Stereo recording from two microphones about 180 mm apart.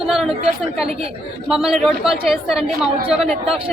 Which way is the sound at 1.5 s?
Centre (ahead or behind).